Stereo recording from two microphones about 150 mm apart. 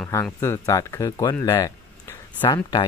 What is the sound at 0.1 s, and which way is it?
Speech, 15° left (ahead or behind).